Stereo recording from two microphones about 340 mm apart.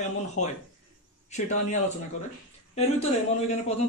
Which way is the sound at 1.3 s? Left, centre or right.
Left.